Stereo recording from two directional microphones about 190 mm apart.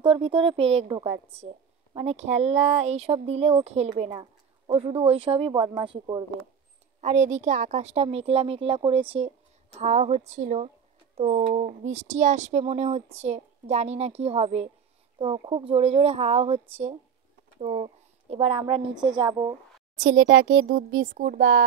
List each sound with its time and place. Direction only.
0.0 s a woman's voice: 30° right (ahead or behind)
7.0 s a woman's voice: 35° right (ahead or behind); by 19.5 s 20° right (ahead or behind)
20.1 s speech: 90° right
21.2 s speech: 50° right (ahead or behind)